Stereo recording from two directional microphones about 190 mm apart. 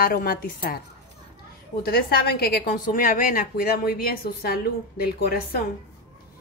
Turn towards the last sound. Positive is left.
turn(degrees=50)  # may be behind; listen again after turning